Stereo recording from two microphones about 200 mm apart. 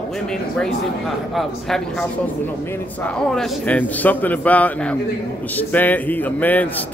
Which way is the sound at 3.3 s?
5° left (ahead or behind).